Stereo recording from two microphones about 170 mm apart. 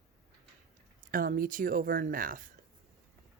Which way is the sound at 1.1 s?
55° right (ahead or behind).